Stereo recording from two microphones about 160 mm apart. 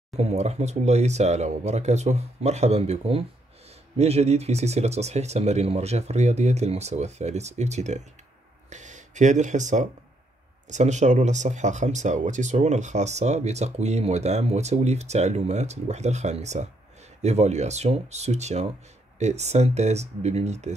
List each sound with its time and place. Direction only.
0.2 s speech: 45° right (ahead or behind)